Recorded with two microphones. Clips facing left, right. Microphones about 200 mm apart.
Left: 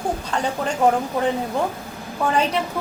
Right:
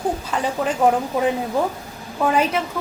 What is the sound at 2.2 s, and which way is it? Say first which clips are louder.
Speech: right 2 dB; 5° right (ahead or behind).